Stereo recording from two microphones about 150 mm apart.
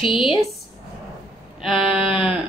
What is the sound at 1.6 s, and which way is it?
Speech, centre (ahead or behind).